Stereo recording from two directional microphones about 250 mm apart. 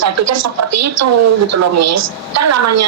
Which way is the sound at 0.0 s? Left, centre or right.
Right.